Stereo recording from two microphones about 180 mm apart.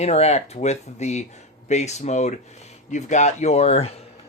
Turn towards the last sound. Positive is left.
turn(degrees=35)  # may be behind; listen again after turning